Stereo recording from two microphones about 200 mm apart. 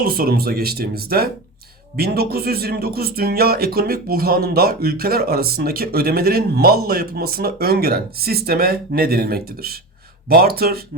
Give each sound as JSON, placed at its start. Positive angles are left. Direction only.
{"t": 0.0, "sound": "speech", "side_deg": -45}